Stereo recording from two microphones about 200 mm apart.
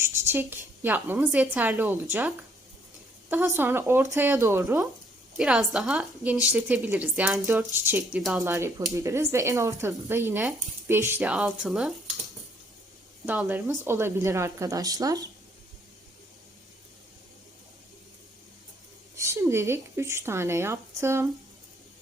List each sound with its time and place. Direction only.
0.0 s speech: 10° right (ahead or behind)
3.2 s speech: 10° right (ahead or behind)
5.4 s a woman's voice: 5° right (ahead or behind)
8.4 s a woman's voice: 15° right (ahead or behind)
13.2 s speech: 5° right (ahead or behind)
19.1 s speech: 15° right (ahead or behind)